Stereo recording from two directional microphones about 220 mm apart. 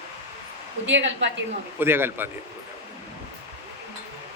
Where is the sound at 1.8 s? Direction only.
10° right (ahead or behind).